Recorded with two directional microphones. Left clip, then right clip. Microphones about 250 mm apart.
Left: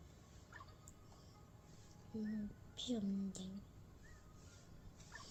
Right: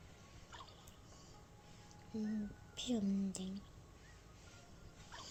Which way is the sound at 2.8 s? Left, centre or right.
Right.